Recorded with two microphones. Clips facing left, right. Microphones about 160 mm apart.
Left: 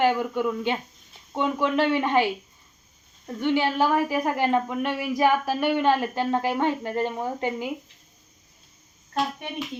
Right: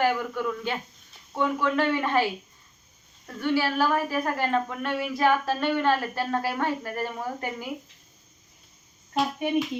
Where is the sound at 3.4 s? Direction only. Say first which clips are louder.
Left 2 dB; 20° left (ahead or behind).